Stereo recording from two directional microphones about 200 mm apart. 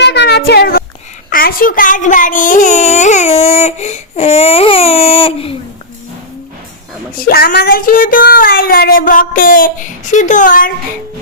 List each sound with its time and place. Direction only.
0.0 s a sound: 60° left (ahead or behind)
1.3 s speech: 45° left (ahead or behind); by 5.5 s 30° left (ahead or behind)
7.2 s speech: 50° left (ahead or behind)